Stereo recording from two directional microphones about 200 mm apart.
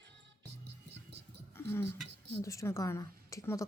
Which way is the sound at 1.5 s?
10° left (ahead or behind).